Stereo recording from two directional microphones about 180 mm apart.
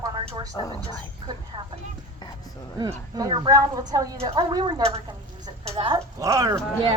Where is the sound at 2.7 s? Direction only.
25° right (ahead or behind).